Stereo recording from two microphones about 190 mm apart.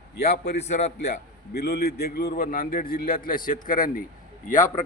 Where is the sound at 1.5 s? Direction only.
55° left (ahead or behind); by 4.8 s 40° left (ahead or behind).